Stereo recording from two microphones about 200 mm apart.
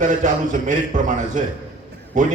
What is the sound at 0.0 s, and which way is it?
A man's voice, 40° right (ahead or behind).